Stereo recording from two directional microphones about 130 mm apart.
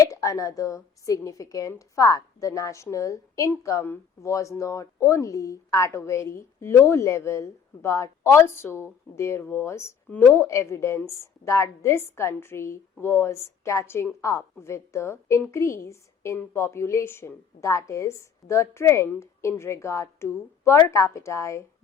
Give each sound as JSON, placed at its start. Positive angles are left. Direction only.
{"t": 0.0, "sound": "a woman's voice", "side_deg": 25}